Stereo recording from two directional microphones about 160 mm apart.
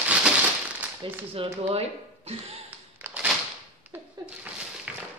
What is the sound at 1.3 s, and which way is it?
A woman's voice, 40° right (ahead or behind).